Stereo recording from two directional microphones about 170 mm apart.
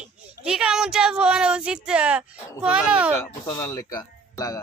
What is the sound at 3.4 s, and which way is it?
Speech, 20° left (ahead or behind).